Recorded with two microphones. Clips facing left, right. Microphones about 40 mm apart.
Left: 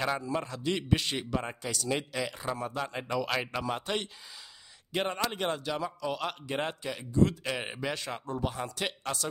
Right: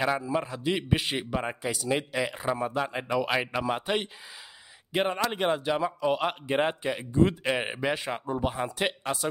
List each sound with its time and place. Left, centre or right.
0.0 s a man's voice: centre